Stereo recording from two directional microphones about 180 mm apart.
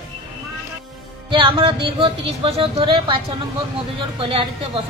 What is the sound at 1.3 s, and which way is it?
Speech, 30° right (ahead or behind).